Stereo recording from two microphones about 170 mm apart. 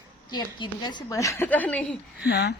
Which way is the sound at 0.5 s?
25° left (ahead or behind).